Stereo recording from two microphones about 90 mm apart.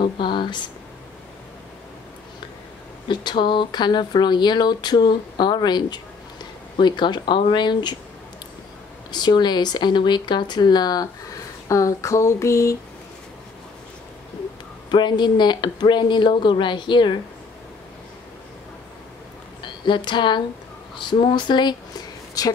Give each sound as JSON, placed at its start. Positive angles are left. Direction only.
{"t": 0.0, "sound": "speech", "side_deg": 65}
{"t": 3.1, "sound": "speech", "side_deg": 60}
{"t": 9.1, "sound": "speech", "side_deg": 55}
{"t": 11.7, "sound": "a sound", "side_deg": 35}
{"t": 14.9, "sound": "speech", "side_deg": 55}
{"t": 19.6, "sound": "speech", "side_deg": 60}
{"t": 22.4, "sound": "speech", "side_deg": 40}